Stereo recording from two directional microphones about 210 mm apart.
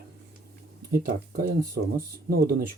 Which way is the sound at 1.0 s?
50° right (ahead or behind).